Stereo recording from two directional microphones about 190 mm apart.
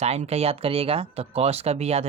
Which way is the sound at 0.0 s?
35° right (ahead or behind).